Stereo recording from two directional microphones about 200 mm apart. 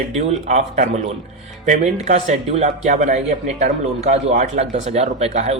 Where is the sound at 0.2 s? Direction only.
35° right (ahead or behind).